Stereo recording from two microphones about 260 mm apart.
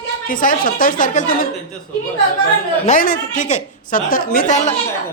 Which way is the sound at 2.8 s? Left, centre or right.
Left.